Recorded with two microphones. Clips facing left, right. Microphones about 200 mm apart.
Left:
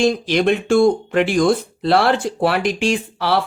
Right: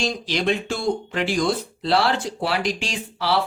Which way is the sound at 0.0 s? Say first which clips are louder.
Left 8 dB; 55° left (ahead or behind).